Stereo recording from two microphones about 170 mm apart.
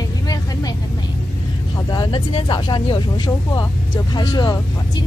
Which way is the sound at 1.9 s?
25° left (ahead or behind).